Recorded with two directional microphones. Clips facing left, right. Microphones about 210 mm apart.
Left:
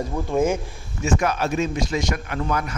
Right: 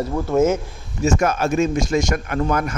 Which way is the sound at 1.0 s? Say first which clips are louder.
Right 3 dB; 45° right (ahead or behind).